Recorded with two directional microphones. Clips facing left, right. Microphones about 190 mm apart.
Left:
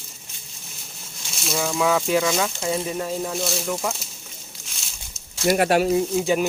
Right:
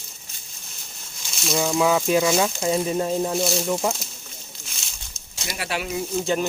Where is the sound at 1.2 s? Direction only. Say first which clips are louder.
Right 2 dB; centre (ahead or behind).